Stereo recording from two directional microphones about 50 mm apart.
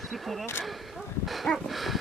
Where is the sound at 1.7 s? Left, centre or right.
Centre.